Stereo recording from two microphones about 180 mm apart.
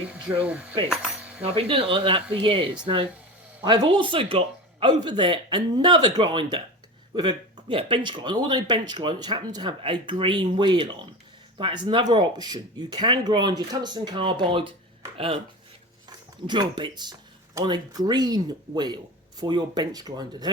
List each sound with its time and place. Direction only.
0.4 s speech: 5° right (ahead or behind)
1.4 s speech: 30° right (ahead or behind)
16.0 s speech: 25° right (ahead or behind)